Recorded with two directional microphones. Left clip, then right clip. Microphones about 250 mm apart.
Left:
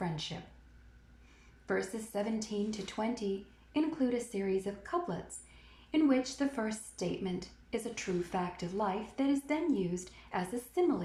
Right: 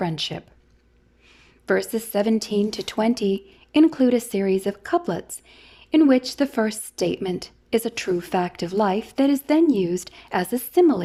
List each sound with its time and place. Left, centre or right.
0.0 s speech: right
1.6 s a woman's voice: right